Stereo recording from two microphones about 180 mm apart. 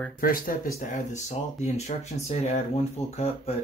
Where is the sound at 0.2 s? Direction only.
55° left (ahead or behind).